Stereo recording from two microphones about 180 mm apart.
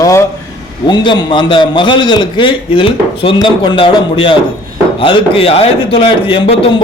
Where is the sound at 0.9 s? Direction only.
25° left (ahead or behind).